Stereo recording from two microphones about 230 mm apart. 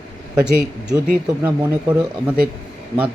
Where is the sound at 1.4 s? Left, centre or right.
Centre.